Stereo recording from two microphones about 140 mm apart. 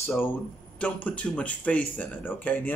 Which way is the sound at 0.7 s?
10° left (ahead or behind).